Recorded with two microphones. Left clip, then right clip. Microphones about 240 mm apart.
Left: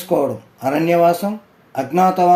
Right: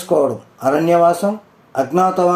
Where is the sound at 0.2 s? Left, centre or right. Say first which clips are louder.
Right 3 dB; left.